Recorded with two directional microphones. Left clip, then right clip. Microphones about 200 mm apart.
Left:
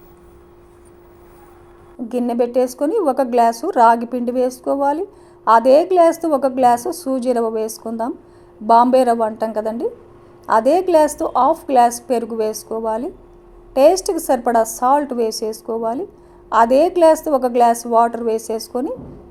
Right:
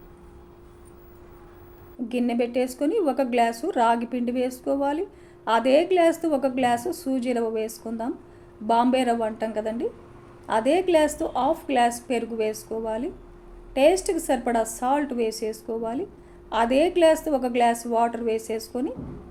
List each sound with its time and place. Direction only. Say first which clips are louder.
2.0 s a woman's voice: left 7 dB; 25° left (ahead or behind)